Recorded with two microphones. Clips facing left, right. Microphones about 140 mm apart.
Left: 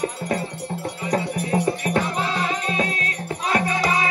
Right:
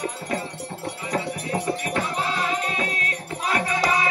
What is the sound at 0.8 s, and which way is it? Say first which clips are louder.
Music: left 3 dB; 40° left (ahead or behind).